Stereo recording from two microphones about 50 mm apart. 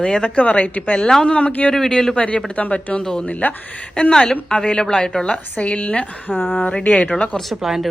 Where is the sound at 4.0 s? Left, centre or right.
Centre.